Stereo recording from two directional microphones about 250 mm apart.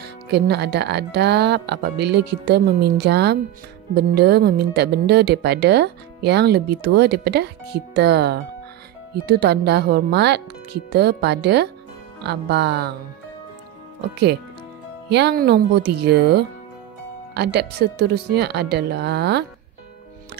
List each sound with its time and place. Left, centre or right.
0.0 s speech: right
15.0 s speech: right